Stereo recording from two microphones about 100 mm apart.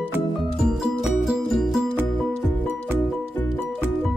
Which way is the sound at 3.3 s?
20° left (ahead or behind).